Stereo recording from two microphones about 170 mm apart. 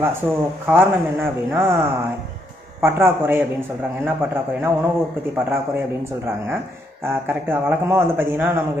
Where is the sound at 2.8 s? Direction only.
15° right (ahead or behind).